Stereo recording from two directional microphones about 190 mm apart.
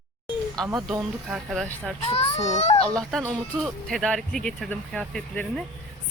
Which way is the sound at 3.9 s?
Centre (ahead or behind).